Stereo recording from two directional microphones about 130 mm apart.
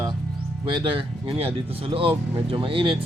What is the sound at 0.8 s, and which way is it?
A man's voice, 40° right (ahead or behind).